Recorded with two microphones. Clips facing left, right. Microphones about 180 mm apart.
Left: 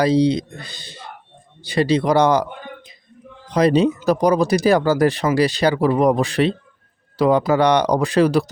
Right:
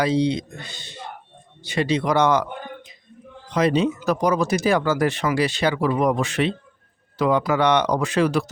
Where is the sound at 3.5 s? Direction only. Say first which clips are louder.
Left 4 dB; 35° left (ahead or behind).